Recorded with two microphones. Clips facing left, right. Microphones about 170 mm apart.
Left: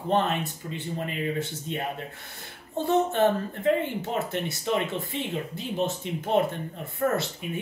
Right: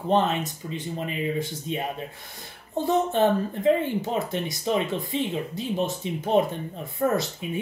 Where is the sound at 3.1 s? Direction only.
15° right (ahead or behind).